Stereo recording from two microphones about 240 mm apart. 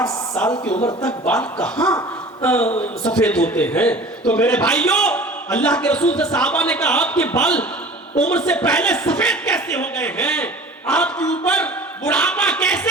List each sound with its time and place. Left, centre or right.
0.4 s a man's voice: centre
0.7 s speech: left
1.0 s a man's voice: centre